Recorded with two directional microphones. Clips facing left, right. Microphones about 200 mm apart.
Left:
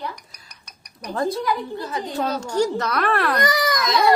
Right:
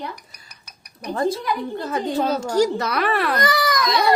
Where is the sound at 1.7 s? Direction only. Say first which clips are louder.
Right 3 dB; 55° right (ahead or behind).